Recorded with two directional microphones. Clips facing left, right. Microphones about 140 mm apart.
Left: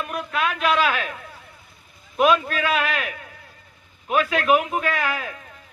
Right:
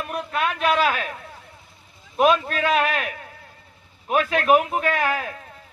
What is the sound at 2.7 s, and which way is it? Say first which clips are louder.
A man's voice: right 4 dB; 45° right (ahead or behind).